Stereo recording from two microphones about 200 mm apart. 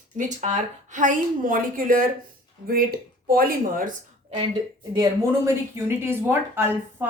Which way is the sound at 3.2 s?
45° right (ahead or behind).